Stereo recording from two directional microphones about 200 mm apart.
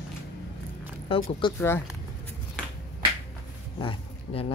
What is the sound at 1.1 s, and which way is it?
Speech, 25° left (ahead or behind).